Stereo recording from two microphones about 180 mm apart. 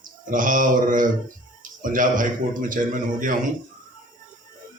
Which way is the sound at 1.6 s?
50° right (ahead or behind).